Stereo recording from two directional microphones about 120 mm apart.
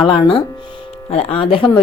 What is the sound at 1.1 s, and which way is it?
Speech, 55° left (ahead or behind).